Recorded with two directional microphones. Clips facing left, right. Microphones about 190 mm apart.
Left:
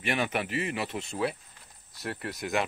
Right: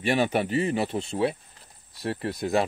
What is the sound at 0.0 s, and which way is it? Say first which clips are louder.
Speech: right 6 dB; 30° right (ahead or behind).